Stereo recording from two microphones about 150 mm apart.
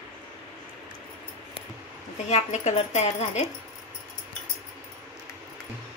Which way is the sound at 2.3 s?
50° left (ahead or behind).